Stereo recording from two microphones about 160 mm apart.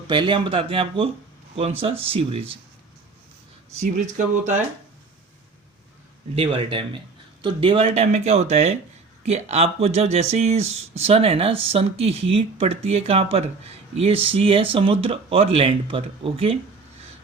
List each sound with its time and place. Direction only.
0.1 s speech: 30° right (ahead or behind)
3.8 s speech: 50° right (ahead or behind)
6.3 s speech: 35° right (ahead or behind)